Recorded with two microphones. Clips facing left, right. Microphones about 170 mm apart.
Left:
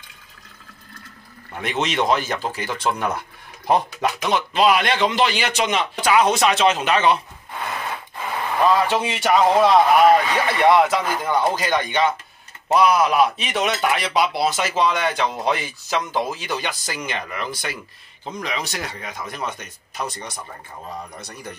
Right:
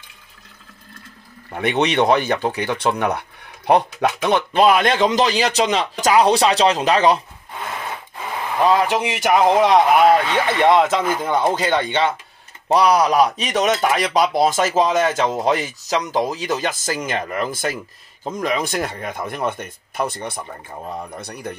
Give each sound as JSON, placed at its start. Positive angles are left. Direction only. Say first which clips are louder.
{"t": 1.6, "sound": "speech", "louder": "right 5 dB", "side_deg": -65}
{"t": 8.5, "sound": "speech", "louder": "right 2 dB", "side_deg": -15}
{"t": 10.2, "sound": "speech", "louder": "right 1 dB", "side_deg": 10}
{"t": 10.7, "sound": "speech", "louder": "even", "side_deg": -20}